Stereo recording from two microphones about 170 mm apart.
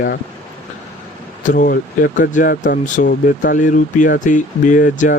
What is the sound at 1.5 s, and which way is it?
Speech, 60° left (ahead or behind).